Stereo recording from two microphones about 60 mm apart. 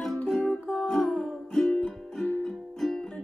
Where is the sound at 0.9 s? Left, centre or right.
Centre.